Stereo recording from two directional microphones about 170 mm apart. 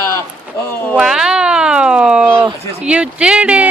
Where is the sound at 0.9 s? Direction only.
5° right (ahead or behind).